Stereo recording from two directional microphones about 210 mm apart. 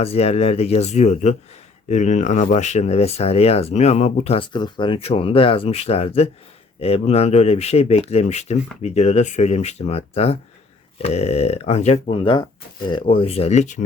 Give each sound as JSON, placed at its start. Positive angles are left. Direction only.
{"t": 0.0, "sound": "speech", "side_deg": 30}